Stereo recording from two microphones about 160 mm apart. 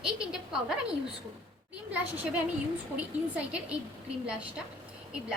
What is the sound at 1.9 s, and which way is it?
A woman's voice, 10° right (ahead or behind).